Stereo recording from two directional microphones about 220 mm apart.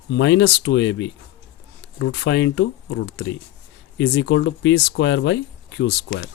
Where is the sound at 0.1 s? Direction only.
55° left (ahead or behind).